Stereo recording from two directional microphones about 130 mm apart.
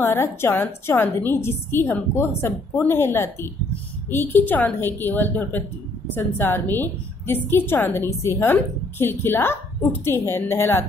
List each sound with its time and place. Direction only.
0.0 s a woman's voice: 20° left (ahead or behind)